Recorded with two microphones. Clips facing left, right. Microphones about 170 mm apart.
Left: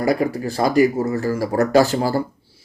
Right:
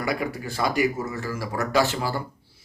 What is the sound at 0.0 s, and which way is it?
Speech, 40° left (ahead or behind).